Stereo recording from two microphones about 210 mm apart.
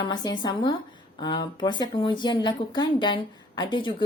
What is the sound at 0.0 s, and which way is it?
A woman's voice, 20° left (ahead or behind).